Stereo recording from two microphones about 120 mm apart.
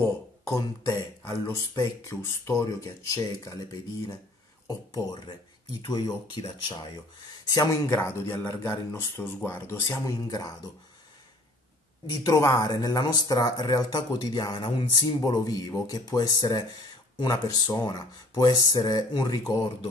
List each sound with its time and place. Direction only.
0.0 s speech: 25° left (ahead or behind)
10.2 s speech: 30° left (ahead or behind)
12.1 s speech: 30° left (ahead or behind)
15.2 s speech: 30° left (ahead or behind)